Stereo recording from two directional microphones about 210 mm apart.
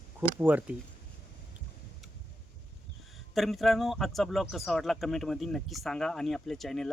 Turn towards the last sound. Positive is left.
turn(degrees=0)  # may be behind; listen again after turning